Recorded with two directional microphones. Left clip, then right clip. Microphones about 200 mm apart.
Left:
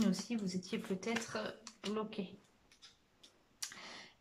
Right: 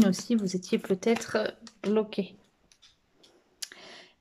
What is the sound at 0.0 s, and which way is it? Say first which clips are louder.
Speech: right 12 dB; 50° right (ahead or behind).